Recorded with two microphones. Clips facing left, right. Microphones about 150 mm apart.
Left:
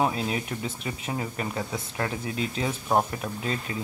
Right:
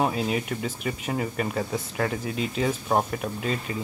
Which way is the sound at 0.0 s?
5° right (ahead or behind).